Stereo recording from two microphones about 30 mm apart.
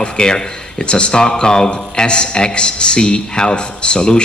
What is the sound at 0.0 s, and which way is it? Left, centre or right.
A man's voice, left.